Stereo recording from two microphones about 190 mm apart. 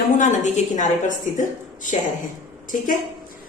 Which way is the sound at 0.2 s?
40° left (ahead or behind).